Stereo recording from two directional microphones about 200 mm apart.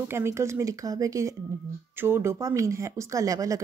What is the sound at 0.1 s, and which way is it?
Speech, 15° right (ahead or behind).